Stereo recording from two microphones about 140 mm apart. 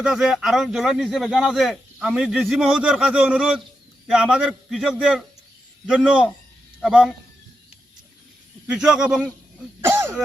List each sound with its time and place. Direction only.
0.0 s speech: 5° right (ahead or behind)
8.6 s speech: 5° right (ahead or behind)
9.8 s throat clearing: 15° right (ahead or behind)